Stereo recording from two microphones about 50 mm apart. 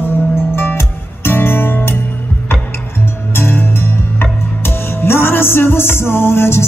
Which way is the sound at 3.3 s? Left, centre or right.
Left.